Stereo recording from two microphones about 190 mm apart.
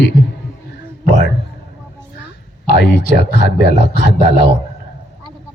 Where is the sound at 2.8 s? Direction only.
60° left (ahead or behind).